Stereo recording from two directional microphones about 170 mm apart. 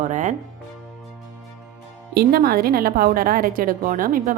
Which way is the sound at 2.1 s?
60° right (ahead or behind).